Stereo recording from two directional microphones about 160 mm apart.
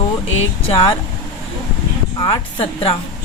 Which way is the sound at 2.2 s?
35° left (ahead or behind).